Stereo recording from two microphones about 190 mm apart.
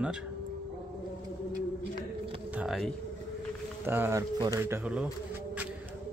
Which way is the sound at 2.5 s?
5° right (ahead or behind).